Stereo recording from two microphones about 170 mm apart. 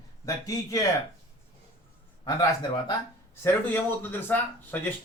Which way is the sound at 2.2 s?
25° left (ahead or behind).